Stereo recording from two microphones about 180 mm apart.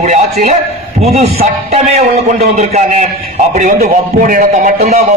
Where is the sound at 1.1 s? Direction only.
35° right (ahead or behind).